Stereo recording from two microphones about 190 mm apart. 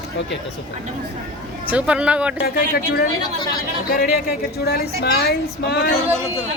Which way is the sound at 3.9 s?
55° left (ahead or behind).